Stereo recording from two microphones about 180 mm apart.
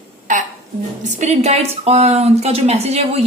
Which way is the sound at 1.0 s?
40° right (ahead or behind).